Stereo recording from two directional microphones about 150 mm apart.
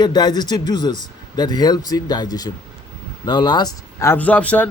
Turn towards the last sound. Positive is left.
turn(degrees=10)  # may be behind; listen again after turning